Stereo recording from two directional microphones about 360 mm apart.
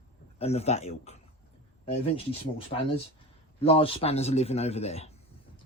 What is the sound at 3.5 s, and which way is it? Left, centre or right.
A man's voice, centre.